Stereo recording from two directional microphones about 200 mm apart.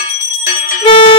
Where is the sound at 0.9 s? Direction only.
25° left (ahead or behind).